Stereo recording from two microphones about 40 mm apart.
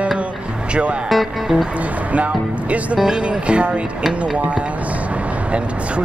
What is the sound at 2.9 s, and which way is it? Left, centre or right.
Speech, centre.